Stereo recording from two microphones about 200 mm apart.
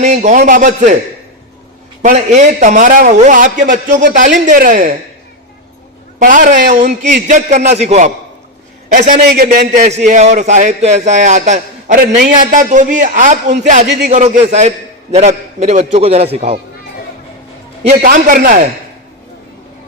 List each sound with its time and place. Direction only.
0.0 s a man's voice: 35° right (ahead or behind)
2.0 s a man's voice: 35° right (ahead or behind)
6.1 s a man's voice: 40° right (ahead or behind)
8.9 s a man's voice: 45° right (ahead or behind)
10.1 s a man's voice: 35° right (ahead or behind)
17.8 s a man's voice: 40° right (ahead or behind)